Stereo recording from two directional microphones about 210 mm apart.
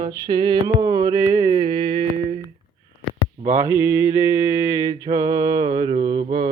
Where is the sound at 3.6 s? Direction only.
10° right (ahead or behind).